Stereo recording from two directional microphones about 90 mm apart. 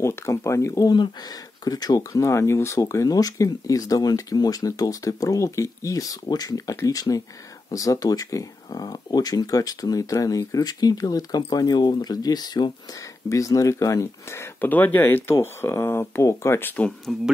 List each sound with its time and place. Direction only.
0.0 s speech: 30° left (ahead or behind); by 12.7 s 50° left (ahead or behind)
13.3 s speech: 40° left (ahead or behind)
14.6 s speech: 20° left (ahead or behind)
16.7 s speech: 15° left (ahead or behind)